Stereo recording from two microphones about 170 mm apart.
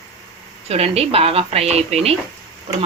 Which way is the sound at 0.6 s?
35° right (ahead or behind).